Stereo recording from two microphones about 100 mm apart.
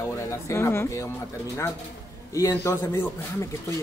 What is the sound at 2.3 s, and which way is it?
Speech, 25° left (ahead or behind).